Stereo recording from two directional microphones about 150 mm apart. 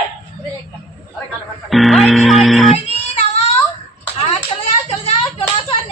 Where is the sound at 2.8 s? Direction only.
45° left (ahead or behind).